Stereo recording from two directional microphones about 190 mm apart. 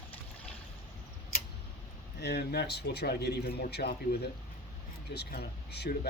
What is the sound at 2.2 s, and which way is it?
A man's voice, 60° left (ahead or behind).